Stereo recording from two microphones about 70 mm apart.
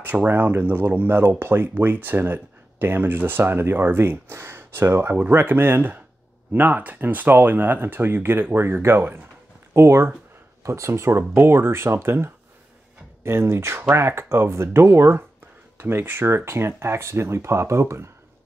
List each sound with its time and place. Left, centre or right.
0.0 s speech: right